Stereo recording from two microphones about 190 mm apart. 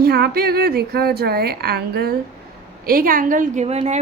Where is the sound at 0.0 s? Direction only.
55° right (ahead or behind).